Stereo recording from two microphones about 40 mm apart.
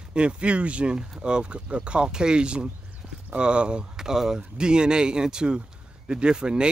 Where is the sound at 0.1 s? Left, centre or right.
Right.